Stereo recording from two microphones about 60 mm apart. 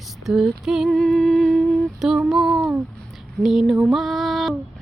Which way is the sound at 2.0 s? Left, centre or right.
Centre.